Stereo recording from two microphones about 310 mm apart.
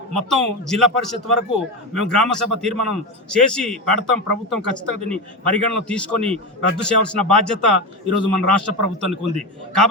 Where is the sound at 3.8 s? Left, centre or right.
Right.